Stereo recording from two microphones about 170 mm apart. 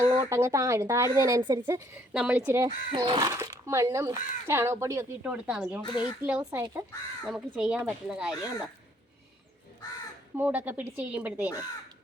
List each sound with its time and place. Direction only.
0.0 s speech: 15° right (ahead or behind)
2.6 s speech: 30° right (ahead or behind)
7.3 s speech: 5° right (ahead or behind)
10.3 s speech: 10° right (ahead or behind)